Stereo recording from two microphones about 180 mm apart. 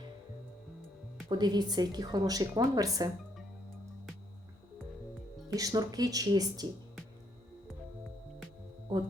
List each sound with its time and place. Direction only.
1.3 s a woman's voice: 20° right (ahead or behind)
5.5 s a woman's voice: 20° right (ahead or behind)